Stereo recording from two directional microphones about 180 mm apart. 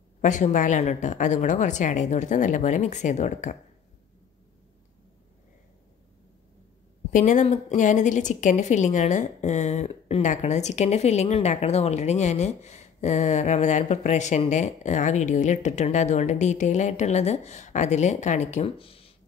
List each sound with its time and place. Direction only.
0.2 s a woman's voice: 45° left (ahead or behind)
7.1 s a woman's voice: 45° left (ahead or behind)